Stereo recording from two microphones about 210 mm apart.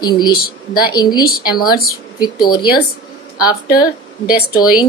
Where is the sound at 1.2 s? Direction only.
45° left (ahead or behind).